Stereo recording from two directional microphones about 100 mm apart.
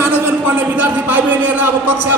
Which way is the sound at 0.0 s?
20° right (ahead or behind).